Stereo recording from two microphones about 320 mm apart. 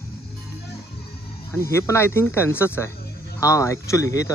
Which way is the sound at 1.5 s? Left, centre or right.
Centre.